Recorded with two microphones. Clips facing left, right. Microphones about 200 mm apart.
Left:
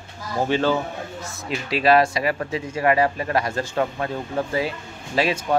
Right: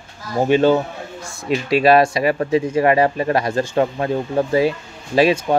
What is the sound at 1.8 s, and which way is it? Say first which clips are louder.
Speech: right 3 dB; 25° right (ahead or behind).